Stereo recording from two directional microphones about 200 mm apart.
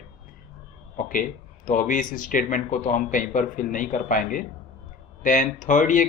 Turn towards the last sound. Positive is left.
turn(degrees=40)  # may be behind; listen again after turning